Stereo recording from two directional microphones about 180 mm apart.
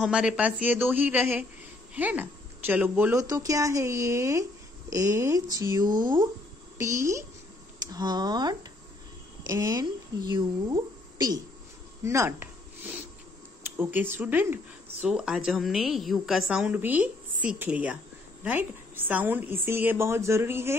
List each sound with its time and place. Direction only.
0.0 s a woman's voice: 5° right (ahead or behind); by 11.4 s 20° right (ahead or behind)
12.0 s a sound: 15° right (ahead or behind)
13.6 s speech: 10° right (ahead or behind)